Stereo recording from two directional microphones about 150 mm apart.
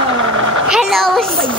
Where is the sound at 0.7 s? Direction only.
Centre (ahead or behind).